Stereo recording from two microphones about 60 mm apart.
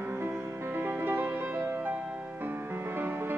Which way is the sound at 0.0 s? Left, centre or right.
Right.